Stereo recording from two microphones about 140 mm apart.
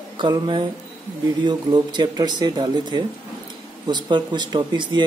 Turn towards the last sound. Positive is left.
turn(degrees=-35)  # may be behind; listen again after turning